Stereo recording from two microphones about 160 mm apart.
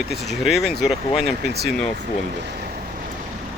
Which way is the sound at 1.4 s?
90° right.